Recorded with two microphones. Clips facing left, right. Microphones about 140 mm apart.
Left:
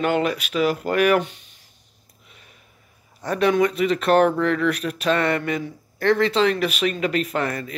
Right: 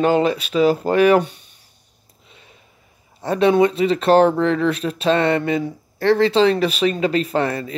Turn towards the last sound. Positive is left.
turn(degrees=-30)  # may be behind; listen again after turning